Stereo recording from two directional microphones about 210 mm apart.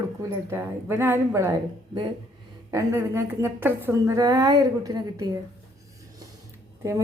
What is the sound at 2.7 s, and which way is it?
A woman's voice, 15° right (ahead or behind).